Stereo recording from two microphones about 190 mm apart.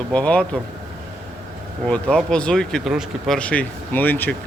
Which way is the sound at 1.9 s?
5° left (ahead or behind).